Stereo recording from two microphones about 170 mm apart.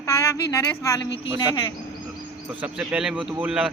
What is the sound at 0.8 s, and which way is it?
Speech, 15° left (ahead or behind).